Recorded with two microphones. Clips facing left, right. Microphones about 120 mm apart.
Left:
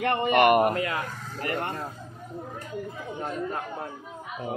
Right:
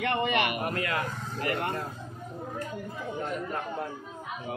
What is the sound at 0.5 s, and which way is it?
Speech, 55° left (ahead or behind).